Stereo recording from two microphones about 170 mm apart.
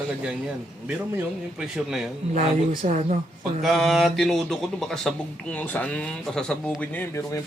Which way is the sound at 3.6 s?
Centre (ahead or behind).